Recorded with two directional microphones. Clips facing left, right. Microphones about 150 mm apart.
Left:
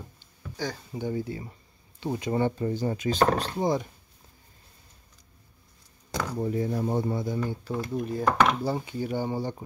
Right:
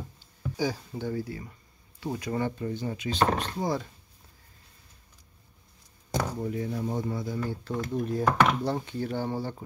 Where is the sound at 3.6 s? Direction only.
20° left (ahead or behind).